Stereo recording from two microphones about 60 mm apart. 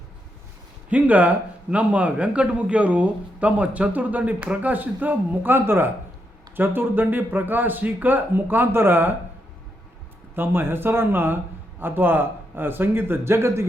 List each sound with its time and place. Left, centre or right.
0.9 s a man's voice: right
10.3 s a man's voice: right